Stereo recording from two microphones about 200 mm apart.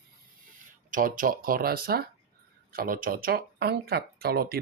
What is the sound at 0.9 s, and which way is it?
Speech, 40° right (ahead or behind).